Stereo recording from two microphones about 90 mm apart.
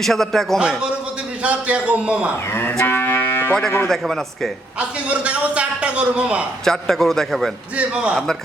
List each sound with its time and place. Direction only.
0.0 s a man's voice: 5° left (ahead or behind)
0.6 s a man's voice: 10° right (ahead or behind)
2.5 s moo: 25° left (ahead or behind)
2.8 s cattle: 25° left (ahead or behind)
3.8 s a man's voice: 5° left (ahead or behind)
5.1 s a man's voice: 15° right (ahead or behind)
6.7 s a man's voice: 5° left (ahead or behind)
7.8 s a man's voice: 10° right (ahead or behind)